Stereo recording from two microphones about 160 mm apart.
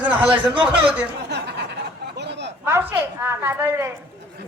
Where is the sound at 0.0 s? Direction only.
10° right (ahead or behind).